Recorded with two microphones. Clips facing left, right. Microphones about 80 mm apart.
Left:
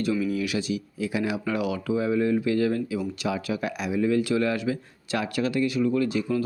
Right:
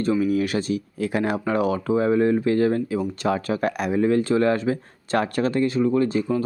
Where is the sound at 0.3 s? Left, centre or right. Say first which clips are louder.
Right 5 dB; right.